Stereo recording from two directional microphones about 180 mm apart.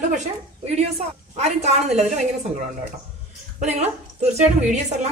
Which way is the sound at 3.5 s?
35° right (ahead or behind).